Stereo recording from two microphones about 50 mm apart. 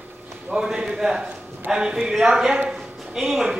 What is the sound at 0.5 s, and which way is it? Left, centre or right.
Speech, centre.